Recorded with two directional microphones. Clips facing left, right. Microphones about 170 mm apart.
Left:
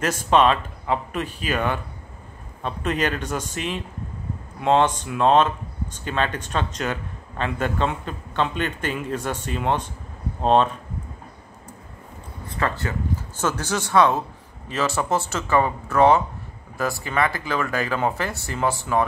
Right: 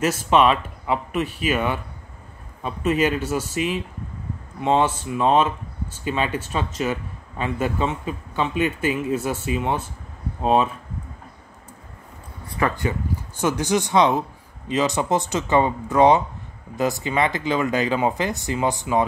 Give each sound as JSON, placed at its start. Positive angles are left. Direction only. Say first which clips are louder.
{"t": 0.0, "sound": "a man's voice", "louder": "right 1 dB", "side_deg": -10}
{"t": 12.5, "sound": "a man's voice", "louder": "right 3 dB", "side_deg": -15}